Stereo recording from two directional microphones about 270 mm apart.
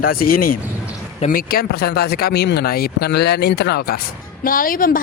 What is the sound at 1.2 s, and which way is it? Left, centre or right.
A man's voice, left.